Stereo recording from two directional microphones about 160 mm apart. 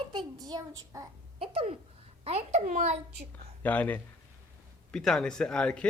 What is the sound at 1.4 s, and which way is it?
A child's voice, 35° right (ahead or behind).